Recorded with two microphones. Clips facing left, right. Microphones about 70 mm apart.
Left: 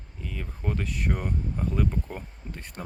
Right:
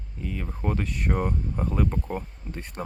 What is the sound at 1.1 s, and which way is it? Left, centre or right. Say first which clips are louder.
Speech: right 4 dB; centre.